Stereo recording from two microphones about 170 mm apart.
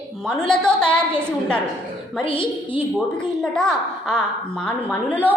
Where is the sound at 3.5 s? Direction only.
5° left (ahead or behind).